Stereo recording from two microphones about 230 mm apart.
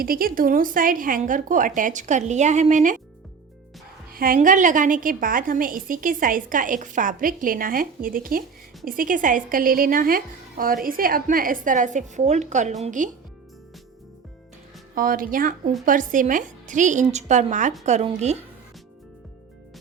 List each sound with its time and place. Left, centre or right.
0.0 s a woman's voice: right
4.1 s a woman's voice: right
14.9 s a woman's voice: right